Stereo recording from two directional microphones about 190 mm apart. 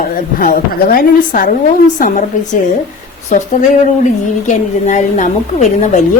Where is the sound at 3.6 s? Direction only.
40° left (ahead or behind).